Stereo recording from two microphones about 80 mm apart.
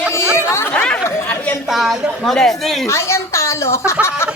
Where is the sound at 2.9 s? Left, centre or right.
Left.